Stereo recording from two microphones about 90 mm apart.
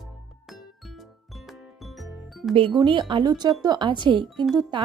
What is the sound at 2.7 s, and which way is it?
A woman's voice, 60° right (ahead or behind).